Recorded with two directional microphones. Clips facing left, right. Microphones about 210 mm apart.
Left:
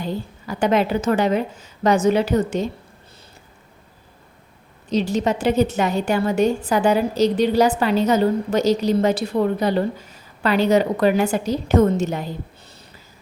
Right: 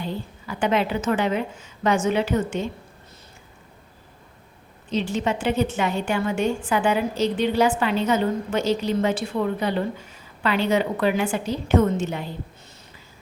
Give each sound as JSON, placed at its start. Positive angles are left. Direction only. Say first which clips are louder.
{"t": 0.0, "sound": "a woman's voice", "louder": "left 3 dB", "side_deg": 40}
{"t": 4.9, "sound": "a woman's voice", "louder": "left 4 dB", "side_deg": 40}